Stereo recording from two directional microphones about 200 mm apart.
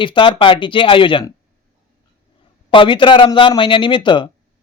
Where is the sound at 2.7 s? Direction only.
25° left (ahead or behind).